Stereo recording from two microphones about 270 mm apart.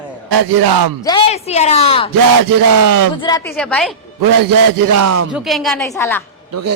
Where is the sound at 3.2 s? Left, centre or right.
Centre.